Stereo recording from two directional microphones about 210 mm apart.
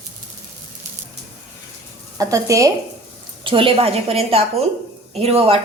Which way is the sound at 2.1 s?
15° right (ahead or behind).